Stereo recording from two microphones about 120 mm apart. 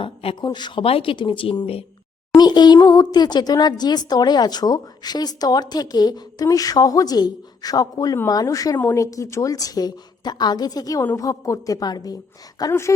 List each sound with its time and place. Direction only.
0.0 s a sound: 50° left (ahead or behind)
0.4 s speech: 40° left (ahead or behind)
0.9 s speech: 50° left (ahead or behind)
2.4 s a woman's voice: 35° left (ahead or behind)
8.8 s a woman's voice: 15° left (ahead or behind)